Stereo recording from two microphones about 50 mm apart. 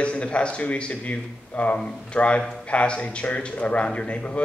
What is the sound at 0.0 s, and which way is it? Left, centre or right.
Speech, left.